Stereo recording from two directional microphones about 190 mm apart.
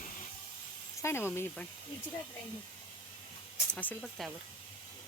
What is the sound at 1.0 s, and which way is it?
Speech, 10° left (ahead or behind).